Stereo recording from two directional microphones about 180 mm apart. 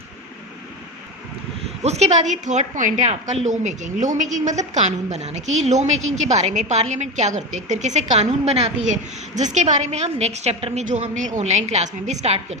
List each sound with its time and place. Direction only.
1.8 s a woman's voice: 35° right (ahead or behind)